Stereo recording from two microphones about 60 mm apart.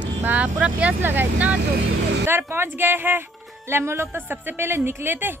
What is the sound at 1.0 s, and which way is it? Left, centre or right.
Speech, right.